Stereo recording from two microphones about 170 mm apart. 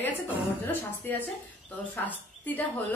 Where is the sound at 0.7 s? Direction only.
10° left (ahead or behind).